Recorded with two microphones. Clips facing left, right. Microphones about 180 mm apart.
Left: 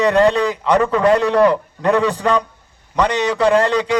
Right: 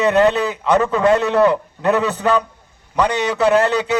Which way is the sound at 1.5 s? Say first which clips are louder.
Left 1 dB; 5° right (ahead or behind).